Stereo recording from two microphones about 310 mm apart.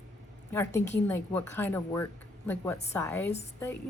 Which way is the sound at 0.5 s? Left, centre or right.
Centre.